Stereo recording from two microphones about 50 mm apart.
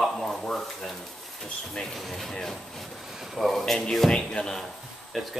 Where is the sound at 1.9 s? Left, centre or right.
Centre.